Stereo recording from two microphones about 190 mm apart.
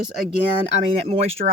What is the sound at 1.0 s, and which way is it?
Speech, 35° right (ahead or behind).